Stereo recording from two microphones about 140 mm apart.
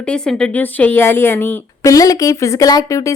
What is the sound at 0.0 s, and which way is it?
A woman's voice, 5° left (ahead or behind).